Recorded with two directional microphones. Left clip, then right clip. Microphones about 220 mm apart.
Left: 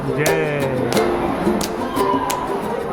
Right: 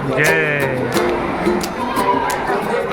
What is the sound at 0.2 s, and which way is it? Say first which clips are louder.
Music: right 4 dB; centre (ahead or behind).